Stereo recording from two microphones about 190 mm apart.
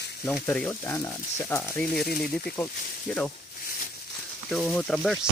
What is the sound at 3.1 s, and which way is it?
Speech, 5° left (ahead or behind).